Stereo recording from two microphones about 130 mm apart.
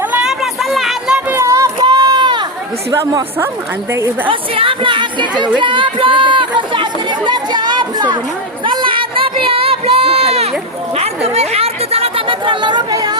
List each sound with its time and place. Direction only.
0.1 s a sound: 5° right (ahead or behind)
1.3 s run: 20° right (ahead or behind)
2.9 s speech: 25° right (ahead or behind)
4.3 s a woman's voice: 45° right (ahead or behind)
8.6 s a sound: 40° right (ahead or behind)
10.9 s speech: 55° right (ahead or behind); by 13.1 s 30° right (ahead or behind)